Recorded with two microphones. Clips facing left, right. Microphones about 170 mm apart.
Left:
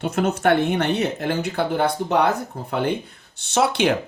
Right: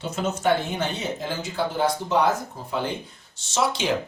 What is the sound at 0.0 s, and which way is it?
Speech, 60° left (ahead or behind).